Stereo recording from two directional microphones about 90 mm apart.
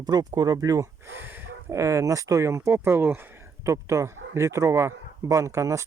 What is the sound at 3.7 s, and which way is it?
Speech, 35° right (ahead or behind).